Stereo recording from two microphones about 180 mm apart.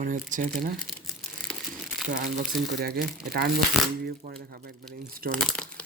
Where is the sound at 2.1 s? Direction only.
50° right (ahead or behind).